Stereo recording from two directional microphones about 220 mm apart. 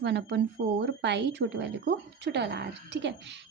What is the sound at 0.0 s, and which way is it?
Speech, 50° right (ahead or behind).